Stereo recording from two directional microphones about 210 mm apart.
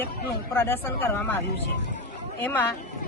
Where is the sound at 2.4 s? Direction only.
10° left (ahead or behind).